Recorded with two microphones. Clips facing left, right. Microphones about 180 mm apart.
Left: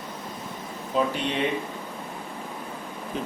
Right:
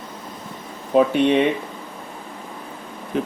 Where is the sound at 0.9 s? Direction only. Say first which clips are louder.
Right 9 dB; 60° right (ahead or behind).